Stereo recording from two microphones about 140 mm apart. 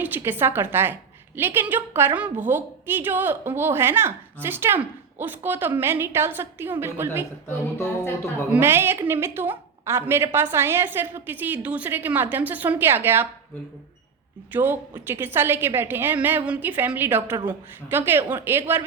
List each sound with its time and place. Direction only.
0.0 s a woman's voice: 15° right (ahead or behind)
7.4 s speech: 20° left (ahead or behind)
8.4 s a woman's voice: 15° right (ahead or behind)
14.5 s a woman's voice: 15° right (ahead or behind)